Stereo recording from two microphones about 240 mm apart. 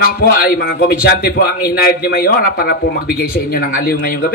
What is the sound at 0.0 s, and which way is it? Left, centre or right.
A man's voice, left.